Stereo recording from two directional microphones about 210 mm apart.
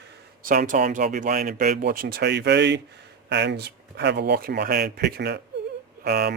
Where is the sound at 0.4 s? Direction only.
40° right (ahead or behind).